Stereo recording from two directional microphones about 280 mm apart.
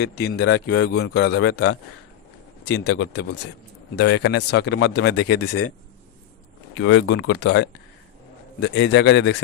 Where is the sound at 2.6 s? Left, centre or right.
Left.